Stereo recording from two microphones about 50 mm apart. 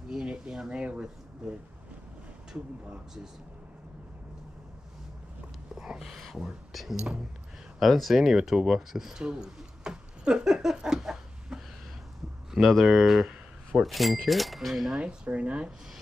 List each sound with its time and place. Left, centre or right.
0.1 s speech: centre
5.8 s a sound: centre
6.7 s speech: centre
7.0 s speech: centre
7.8 s speech: centre
9.2 s a sound: centre
12.8 s speech: centre
15.0 s speech: right